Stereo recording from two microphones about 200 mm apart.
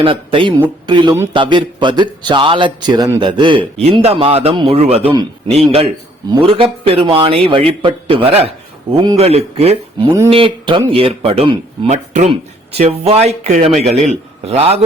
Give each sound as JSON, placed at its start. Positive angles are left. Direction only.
{"t": 0.0, "sound": "a man's voice", "side_deg": -25}
{"t": 11.9, "sound": "speech", "side_deg": -35}